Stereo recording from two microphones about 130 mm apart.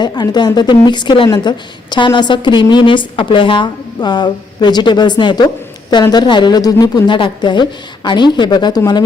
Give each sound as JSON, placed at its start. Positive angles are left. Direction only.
{"t": 0.0, "sound": "a woman's voice", "side_deg": 35}